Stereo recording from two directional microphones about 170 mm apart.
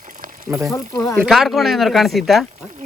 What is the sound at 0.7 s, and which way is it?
Speech, 15° left (ahead or behind).